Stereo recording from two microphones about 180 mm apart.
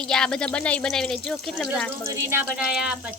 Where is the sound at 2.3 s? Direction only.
10° right (ahead or behind).